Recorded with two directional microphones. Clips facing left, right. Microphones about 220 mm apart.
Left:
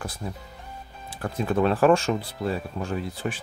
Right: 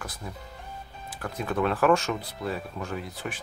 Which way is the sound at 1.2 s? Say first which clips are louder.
Left 4 dB; 30° left (ahead or behind).